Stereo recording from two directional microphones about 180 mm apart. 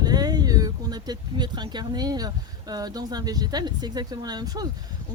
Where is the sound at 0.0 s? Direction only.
20° right (ahead or behind).